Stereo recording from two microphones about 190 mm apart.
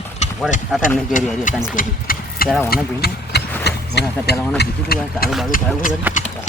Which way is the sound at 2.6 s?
55° left (ahead or behind).